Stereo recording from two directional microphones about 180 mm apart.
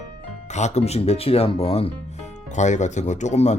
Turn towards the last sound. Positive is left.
turn(degrees=40)  # may be behind; listen again after turning